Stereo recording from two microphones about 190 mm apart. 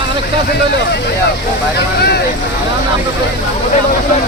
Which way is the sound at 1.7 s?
60° left (ahead or behind).